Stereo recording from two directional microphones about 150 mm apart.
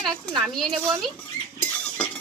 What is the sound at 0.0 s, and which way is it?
Speech, 30° right (ahead or behind).